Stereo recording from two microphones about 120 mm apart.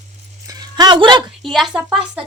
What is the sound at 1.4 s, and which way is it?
Speech, centre (ahead or behind).